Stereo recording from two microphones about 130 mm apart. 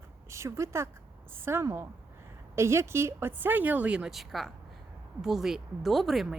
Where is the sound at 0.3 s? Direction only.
20° right (ahead or behind).